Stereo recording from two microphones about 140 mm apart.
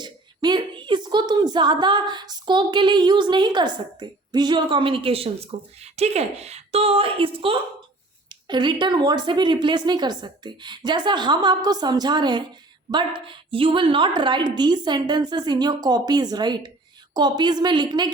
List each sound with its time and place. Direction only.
0.0 s a woman's voice: 30° right (ahead or behind)